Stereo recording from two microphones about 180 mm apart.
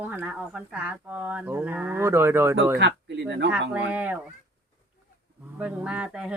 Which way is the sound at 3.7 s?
5° right (ahead or behind).